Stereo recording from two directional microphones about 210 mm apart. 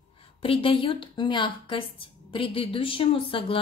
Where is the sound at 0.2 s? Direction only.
25° left (ahead or behind).